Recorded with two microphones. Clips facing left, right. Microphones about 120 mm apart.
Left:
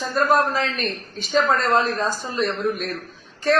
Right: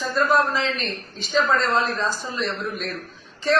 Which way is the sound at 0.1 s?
50° left (ahead or behind).